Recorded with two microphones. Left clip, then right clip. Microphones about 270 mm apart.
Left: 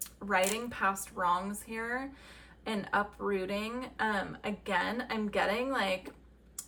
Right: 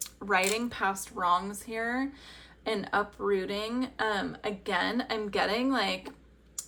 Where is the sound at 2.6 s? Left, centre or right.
Centre.